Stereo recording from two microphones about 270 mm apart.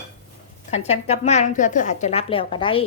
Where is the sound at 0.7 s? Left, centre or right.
Left.